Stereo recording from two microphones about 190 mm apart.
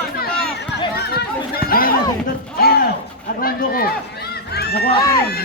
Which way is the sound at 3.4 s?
50° left (ahead or behind).